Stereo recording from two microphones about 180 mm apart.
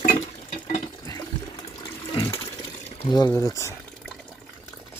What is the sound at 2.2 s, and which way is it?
Water, 15° left (ahead or behind).